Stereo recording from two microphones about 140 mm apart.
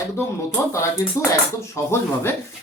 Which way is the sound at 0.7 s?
20° left (ahead or behind).